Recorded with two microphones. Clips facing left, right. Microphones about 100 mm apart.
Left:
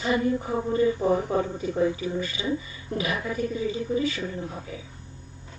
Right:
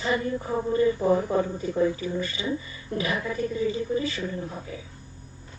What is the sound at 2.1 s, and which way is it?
Speech, 40° right (ahead or behind).